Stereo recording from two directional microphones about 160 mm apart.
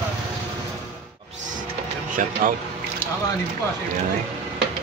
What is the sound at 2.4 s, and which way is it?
Speech, 55° right (ahead or behind).